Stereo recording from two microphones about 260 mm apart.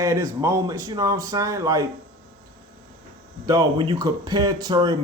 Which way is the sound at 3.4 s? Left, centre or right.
Centre.